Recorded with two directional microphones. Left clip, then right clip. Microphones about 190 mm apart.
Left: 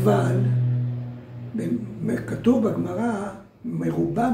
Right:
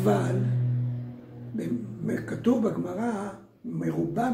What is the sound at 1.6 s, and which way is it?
A man's voice, 15° right (ahead or behind).